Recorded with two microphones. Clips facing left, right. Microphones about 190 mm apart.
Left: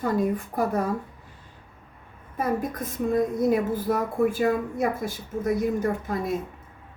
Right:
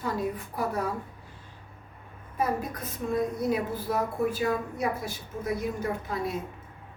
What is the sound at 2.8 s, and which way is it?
A woman's voice, 50° left (ahead or behind).